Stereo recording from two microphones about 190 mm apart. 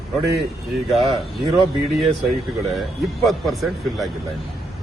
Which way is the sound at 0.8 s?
Centre (ahead or behind).